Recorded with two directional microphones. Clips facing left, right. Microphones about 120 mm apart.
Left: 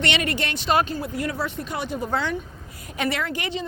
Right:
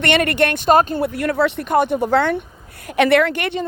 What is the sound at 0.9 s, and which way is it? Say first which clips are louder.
Speech: right 8 dB; 65° right (ahead or behind).